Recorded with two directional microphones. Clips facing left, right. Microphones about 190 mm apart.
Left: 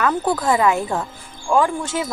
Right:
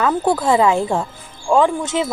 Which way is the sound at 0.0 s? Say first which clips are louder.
Right 2 dB; 25° right (ahead or behind).